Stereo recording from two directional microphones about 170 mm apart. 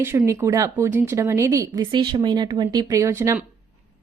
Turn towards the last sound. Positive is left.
turn(degrees=-15)  # may be behind; listen again after turning